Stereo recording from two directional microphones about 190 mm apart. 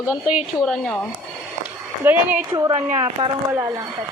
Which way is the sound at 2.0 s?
10° right (ahead or behind).